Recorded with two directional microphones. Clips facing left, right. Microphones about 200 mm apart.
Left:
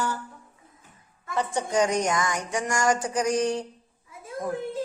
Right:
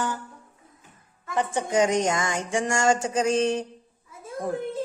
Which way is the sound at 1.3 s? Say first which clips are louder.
Right 1 dB; 20° right (ahead or behind).